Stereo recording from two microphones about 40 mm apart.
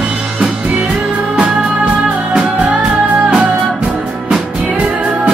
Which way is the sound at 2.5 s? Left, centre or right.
Right.